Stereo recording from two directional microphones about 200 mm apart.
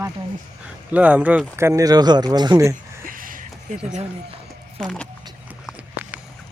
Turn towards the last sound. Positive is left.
turn(degrees=-5)  # may be behind; listen again after turning